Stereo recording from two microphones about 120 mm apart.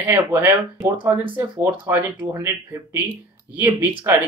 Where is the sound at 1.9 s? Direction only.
25° right (ahead or behind).